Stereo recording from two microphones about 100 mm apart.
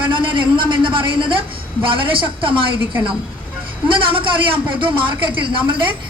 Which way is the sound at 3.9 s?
60° right (ahead or behind).